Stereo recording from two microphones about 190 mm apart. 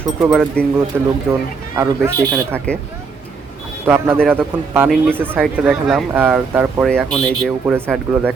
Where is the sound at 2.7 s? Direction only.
5° left (ahead or behind).